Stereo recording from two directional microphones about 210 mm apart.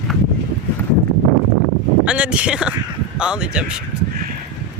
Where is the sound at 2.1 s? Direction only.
5° right (ahead or behind).